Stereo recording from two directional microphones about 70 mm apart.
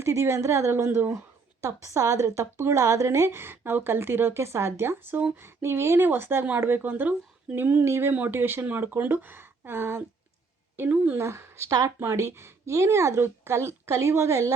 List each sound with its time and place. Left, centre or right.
0.0 s a woman's voice: right
10.9 s speech: right
11.2 s speech: right